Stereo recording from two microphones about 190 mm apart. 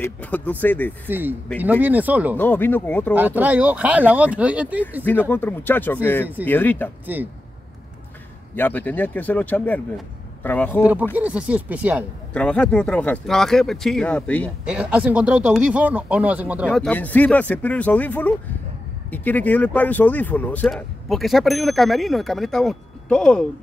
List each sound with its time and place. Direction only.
0.0 s speech: 10° left (ahead or behind)
1.0 s speech: 10° right (ahead or behind)
2.3 s speech: 10° left (ahead or behind)
3.2 s speech: 10° right (ahead or behind)
5.3 s speech: 10° left (ahead or behind)
7.1 s speech: 10° right (ahead or behind)
8.5 s speech: 10° left (ahead or behind)
10.8 s speech: 10° right (ahead or behind)
12.4 s speech: 5° left (ahead or behind)
14.7 s speech: 5° right (ahead or behind)
16.8 s speech: 10° left (ahead or behind)